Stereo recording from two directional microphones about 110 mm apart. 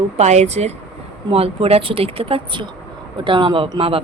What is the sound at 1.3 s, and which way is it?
Speech, 60° right (ahead or behind).